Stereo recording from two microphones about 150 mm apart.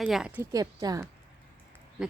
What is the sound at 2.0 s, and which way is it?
Speech, 5° right (ahead or behind).